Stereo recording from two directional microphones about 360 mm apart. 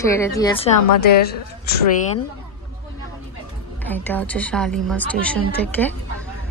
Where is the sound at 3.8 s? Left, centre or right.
Centre.